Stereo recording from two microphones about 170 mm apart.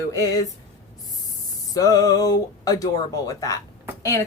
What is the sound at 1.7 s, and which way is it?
A woman's voice, 20° left (ahead or behind).